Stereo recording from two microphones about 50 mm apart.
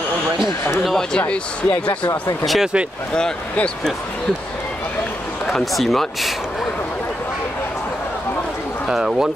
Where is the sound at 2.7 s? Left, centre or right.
Right.